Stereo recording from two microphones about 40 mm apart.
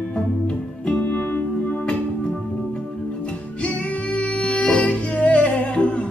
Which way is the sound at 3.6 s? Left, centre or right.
Left.